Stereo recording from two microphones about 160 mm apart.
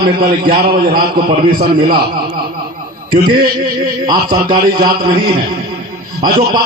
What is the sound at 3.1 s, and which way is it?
Speech, 65° right (ahead or behind).